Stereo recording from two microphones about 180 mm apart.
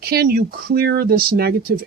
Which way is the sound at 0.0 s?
60° right (ahead or behind).